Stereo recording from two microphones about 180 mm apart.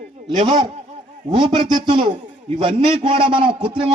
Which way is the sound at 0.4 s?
25° right (ahead or behind).